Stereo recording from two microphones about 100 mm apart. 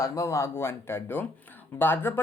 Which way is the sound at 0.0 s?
30° left (ahead or behind).